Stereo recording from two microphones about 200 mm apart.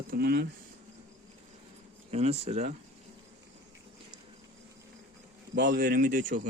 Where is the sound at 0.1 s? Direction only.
50° right (ahead or behind).